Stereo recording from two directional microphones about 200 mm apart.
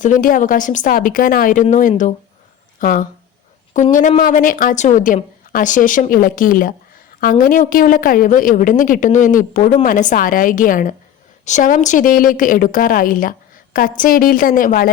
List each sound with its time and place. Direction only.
0.0 s a woman's voice: 40° left (ahead or behind)